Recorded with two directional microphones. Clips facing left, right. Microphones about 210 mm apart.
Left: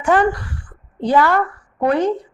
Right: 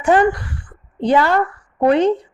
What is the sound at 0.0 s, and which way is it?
A woman's voice, 20° right (ahead or behind).